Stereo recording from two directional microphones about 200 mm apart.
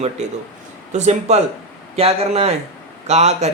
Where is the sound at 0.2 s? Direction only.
35° right (ahead or behind).